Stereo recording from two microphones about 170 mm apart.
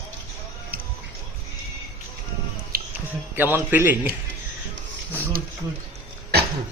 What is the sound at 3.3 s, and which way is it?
Speech, 10° right (ahead or behind).